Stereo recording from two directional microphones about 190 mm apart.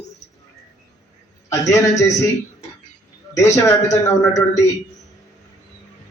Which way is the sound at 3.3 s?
15° left (ahead or behind).